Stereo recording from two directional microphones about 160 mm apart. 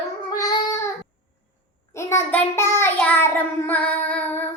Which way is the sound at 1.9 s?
15° left (ahead or behind).